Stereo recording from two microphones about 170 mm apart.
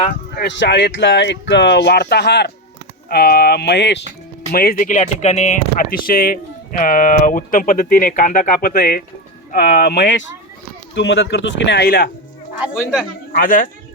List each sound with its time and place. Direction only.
0.1 s speech: 80° left
3.1 s speech: 65° left (ahead or behind); by 4.0 s 90° left
4.5 s speech: 60° left (ahead or behind)
12.5 s speech: 5° right (ahead or behind)
13.3 s speech: 55° left (ahead or behind)